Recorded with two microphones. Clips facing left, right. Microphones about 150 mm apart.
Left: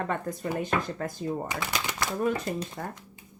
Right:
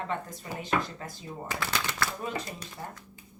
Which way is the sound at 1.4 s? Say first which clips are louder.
Left 1 dB; 15° left (ahead or behind).